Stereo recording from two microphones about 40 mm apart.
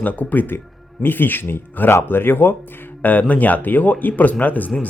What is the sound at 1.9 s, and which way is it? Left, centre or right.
Speech, left.